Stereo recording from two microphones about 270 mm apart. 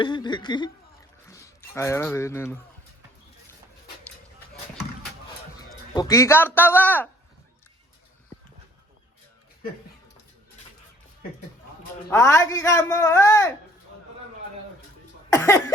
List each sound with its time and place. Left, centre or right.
0.0 s a man's voice: centre
5.9 s a man's voice: centre
12.0 s a man's voice: centre
15.3 s cough: centre